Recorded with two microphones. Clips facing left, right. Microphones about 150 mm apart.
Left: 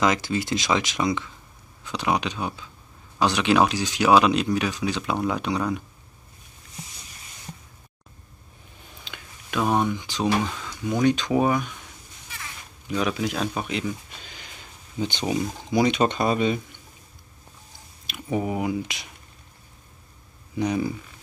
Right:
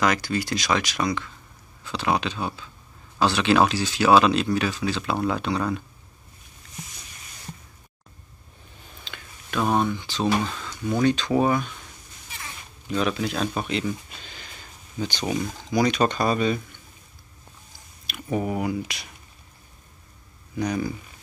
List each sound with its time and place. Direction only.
0.0 s speech: 20° left (ahead or behind)
9.0 s speech: 10° left (ahead or behind)
12.9 s speech: 10° left (ahead or behind)
18.0 s speech: 15° left (ahead or behind)
20.5 s speech: 20° left (ahead or behind)